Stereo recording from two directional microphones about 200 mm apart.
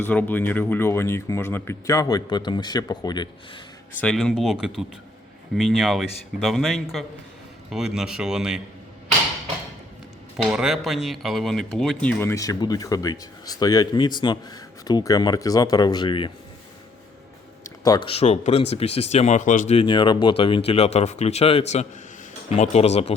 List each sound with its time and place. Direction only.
0.0 s speech: 10° left (ahead or behind)
4.0 s speech: 5° left (ahead or behind)
10.3 s speech: centre (ahead or behind); by 16.3 s 25° left (ahead or behind)
17.8 s speech: 25° left (ahead or behind)